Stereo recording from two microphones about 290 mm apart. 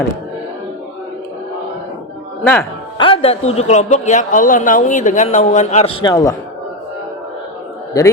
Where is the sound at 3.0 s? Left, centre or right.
Centre.